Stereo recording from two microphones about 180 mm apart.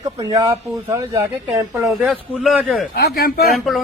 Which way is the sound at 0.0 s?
20° right (ahead or behind).